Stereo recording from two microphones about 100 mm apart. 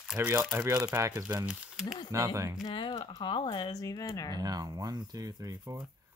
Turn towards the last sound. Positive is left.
turn(degrees=-40)  # may be behind; listen again after turning